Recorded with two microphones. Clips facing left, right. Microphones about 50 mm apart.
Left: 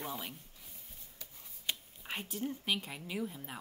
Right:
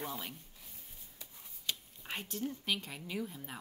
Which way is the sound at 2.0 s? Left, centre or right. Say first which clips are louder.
Left 1 dB; centre.